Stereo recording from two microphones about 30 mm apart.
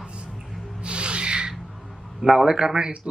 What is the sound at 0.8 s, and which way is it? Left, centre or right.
Owl, right.